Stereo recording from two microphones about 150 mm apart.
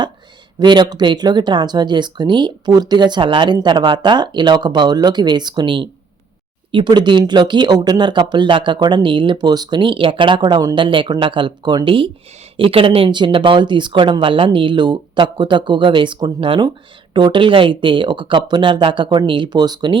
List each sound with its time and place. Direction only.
0.6 s speech: 30° right (ahead or behind)